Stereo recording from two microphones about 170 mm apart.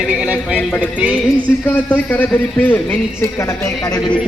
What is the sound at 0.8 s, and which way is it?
Music, 5° right (ahead or behind).